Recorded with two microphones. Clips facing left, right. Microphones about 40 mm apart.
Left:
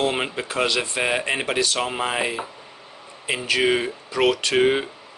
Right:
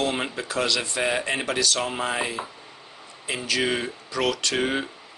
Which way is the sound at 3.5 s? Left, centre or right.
Left.